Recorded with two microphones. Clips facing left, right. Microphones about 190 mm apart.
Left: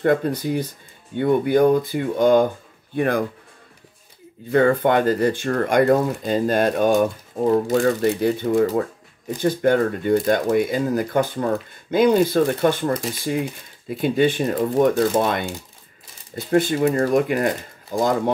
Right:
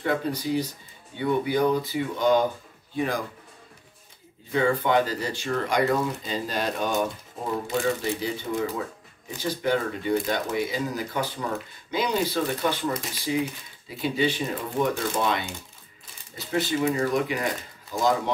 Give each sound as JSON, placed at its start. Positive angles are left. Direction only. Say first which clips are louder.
{"t": 0.0, "sound": "speech", "louder": "left 7 dB", "side_deg": 55}
{"t": 4.5, "sound": "speech", "louder": "left 6 dB", "side_deg": 55}